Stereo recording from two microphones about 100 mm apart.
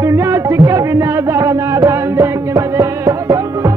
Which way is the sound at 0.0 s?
30° right (ahead or behind).